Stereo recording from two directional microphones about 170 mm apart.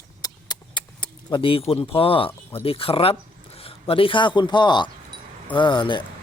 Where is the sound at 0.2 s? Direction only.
25° left (ahead or behind).